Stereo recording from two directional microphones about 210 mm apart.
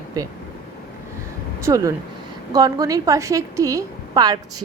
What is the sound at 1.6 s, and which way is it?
Speech, 15° right (ahead or behind).